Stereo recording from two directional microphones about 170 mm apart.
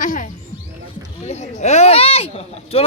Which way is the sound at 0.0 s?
50° left (ahead or behind).